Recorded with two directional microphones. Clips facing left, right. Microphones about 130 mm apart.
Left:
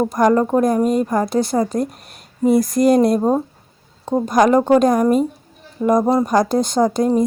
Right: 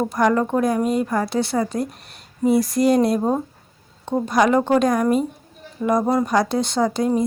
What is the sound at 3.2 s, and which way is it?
Speech, 20° left (ahead or behind).